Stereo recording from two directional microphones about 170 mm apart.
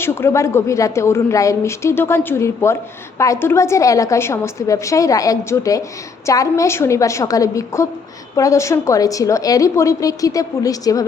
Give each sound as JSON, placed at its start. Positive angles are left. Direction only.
{"t": 0.0, "sound": "a woman's voice", "side_deg": 15}